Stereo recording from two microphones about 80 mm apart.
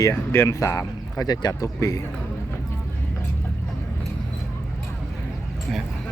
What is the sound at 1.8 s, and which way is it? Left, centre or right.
Speech, left.